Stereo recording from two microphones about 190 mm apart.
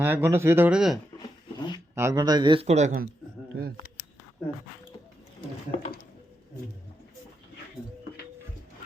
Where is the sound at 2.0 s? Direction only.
20° right (ahead or behind); by 3.1 s 45° right (ahead or behind).